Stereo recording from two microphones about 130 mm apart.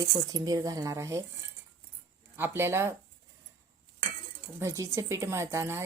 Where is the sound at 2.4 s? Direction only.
20° right (ahead or behind).